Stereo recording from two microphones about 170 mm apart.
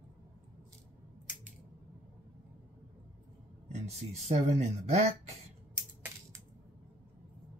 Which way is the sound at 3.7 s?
40° right (ahead or behind).